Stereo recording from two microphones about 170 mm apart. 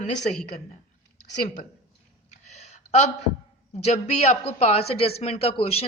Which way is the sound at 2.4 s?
40° left (ahead or behind).